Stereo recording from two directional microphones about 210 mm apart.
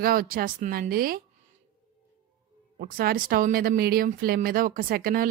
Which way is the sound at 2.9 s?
45° right (ahead or behind).